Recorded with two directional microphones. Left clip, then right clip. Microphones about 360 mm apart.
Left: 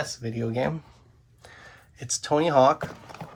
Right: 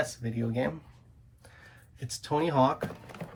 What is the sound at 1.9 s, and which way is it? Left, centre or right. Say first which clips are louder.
Speech: left 6 dB; centre.